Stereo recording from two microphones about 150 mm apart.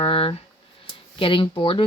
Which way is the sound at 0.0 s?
40° left (ahead or behind).